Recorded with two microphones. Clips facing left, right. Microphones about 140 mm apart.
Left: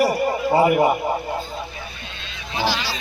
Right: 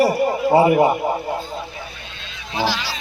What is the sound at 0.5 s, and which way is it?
Speech, 25° right (ahead or behind).